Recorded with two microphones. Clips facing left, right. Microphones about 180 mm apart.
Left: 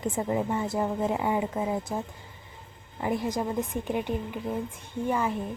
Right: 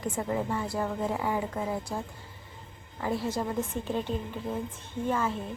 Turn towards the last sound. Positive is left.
turn(degrees=15)  # may be behind; listen again after turning